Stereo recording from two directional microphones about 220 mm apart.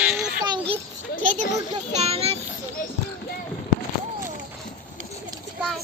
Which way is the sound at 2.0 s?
25° right (ahead or behind).